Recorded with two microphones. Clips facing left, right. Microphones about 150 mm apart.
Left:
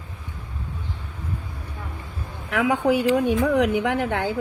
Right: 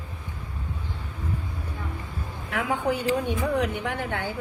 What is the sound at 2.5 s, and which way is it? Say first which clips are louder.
Speech: left 6 dB; 90° left.